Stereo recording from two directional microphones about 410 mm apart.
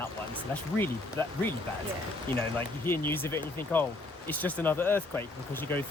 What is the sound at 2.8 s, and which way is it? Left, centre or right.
Speech, centre.